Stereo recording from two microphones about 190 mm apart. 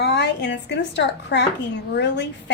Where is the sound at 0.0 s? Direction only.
65° left (ahead or behind).